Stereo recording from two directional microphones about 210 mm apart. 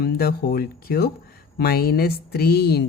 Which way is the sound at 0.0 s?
45° left (ahead or behind).